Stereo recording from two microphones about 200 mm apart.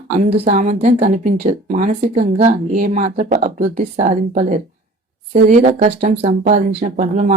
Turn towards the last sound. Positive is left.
turn(degrees=-35)  # may be behind; listen again after turning